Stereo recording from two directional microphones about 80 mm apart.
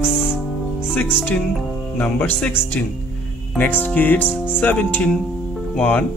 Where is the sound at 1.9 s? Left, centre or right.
Centre.